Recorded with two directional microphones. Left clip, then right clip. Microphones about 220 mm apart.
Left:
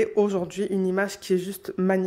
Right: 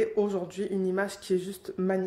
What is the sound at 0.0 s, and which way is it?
Speech, 35° left (ahead or behind).